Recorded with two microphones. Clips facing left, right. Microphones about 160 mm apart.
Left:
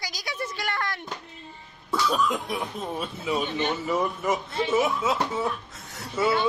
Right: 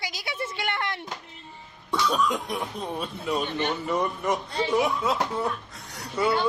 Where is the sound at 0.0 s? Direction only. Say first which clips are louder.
Right 1 dB; 25° right (ahead or behind).